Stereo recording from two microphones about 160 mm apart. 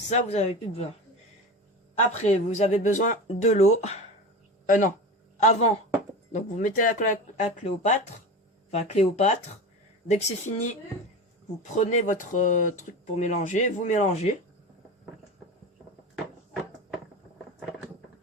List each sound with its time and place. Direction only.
0.1 s speech: 45° left (ahead or behind)
2.2 s speech: 45° left (ahead or behind)
6.3 s speech: 55° left (ahead or behind)
11.7 s speech: 50° left (ahead or behind)